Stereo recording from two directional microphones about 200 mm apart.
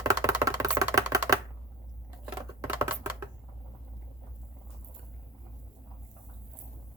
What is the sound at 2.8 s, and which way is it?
Typewriter, 10° right (ahead or behind).